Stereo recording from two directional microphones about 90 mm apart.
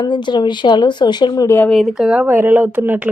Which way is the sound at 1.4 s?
25° left (ahead or behind).